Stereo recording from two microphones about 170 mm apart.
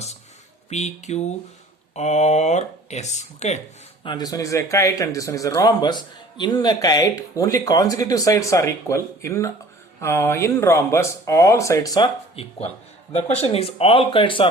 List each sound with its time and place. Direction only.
0.7 s speech: 40° left (ahead or behind)
4.0 s speech: 25° left (ahead or behind)
13.1 s speech: 40° left (ahead or behind)